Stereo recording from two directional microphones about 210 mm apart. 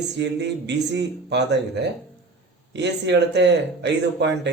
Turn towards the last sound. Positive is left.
turn(degrees=-55)  # may be behind; listen again after turning